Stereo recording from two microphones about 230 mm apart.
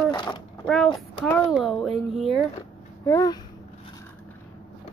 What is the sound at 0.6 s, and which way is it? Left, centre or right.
Speech, centre.